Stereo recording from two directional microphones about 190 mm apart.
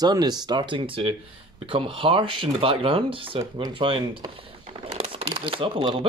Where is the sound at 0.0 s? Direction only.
20° right (ahead or behind).